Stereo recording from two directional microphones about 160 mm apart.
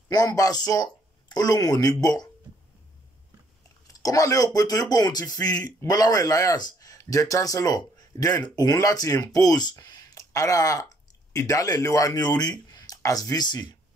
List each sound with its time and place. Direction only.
0.1 s speech: 25° left (ahead or behind)
3.8 s speech: 20° left (ahead or behind)